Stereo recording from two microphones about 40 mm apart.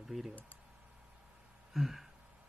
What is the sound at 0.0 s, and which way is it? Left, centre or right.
Speech, centre.